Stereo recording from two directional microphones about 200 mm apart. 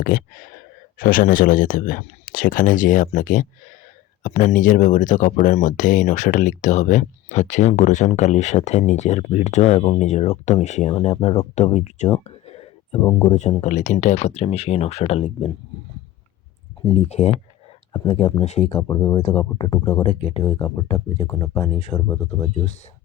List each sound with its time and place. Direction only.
0.0 s speech: 45° left (ahead or behind)
12.2 s whispering: 30° left (ahead or behind)
13.1 s speech: 20° left (ahead or behind)
13.5 s speech: 35° left (ahead or behind)
16.9 s speech: 30° left (ahead or behind)
18.4 s speech: 35° left (ahead or behind)
18.7 s speech: 10° left (ahead or behind)
19.5 s speech: 25° left (ahead or behind)
20.5 s speech: 10° left (ahead or behind)
20.8 s speech: 25° left (ahead or behind)
21.2 s speech: 15° left (ahead or behind)